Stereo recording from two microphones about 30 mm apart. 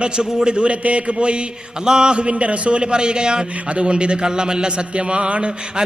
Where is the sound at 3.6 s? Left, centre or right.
Right.